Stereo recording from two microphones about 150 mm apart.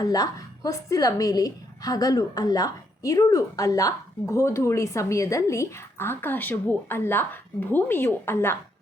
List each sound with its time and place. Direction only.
0.0 s a woman's voice: 25° left (ahead or behind)